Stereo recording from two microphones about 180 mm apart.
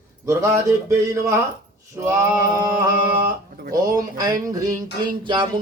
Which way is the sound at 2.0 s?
20° right (ahead or behind).